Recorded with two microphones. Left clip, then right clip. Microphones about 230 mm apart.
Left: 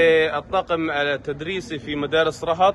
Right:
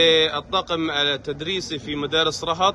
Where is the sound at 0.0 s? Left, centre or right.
Right.